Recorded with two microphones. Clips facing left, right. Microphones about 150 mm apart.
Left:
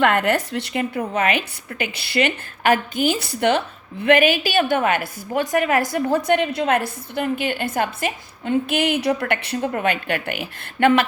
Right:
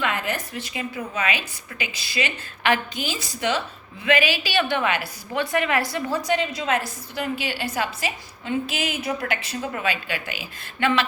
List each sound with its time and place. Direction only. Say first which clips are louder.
0.0 s a woman's voice: left 8 dB; 65° left (ahead or behind)
2.6 s a woman's voice: left 6 dB; 45° left (ahead or behind)